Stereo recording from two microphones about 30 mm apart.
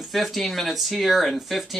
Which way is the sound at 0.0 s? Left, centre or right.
Centre.